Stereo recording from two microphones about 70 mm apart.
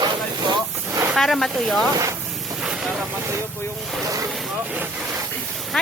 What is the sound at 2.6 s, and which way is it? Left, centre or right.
Vehicle, centre.